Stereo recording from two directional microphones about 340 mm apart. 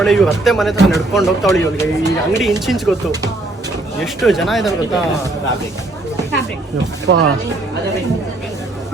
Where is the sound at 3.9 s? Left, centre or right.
Centre.